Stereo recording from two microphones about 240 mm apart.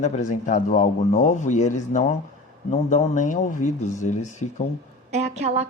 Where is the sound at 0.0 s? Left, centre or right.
Left.